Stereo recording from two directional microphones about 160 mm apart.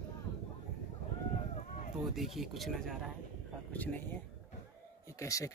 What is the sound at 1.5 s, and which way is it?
Run, 45° left (ahead or behind).